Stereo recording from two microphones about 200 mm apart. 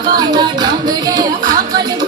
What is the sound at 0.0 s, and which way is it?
Music, 20° right (ahead or behind).